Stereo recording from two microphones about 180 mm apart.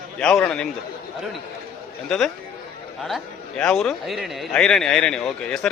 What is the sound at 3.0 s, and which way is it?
A man's voice, 5° left (ahead or behind).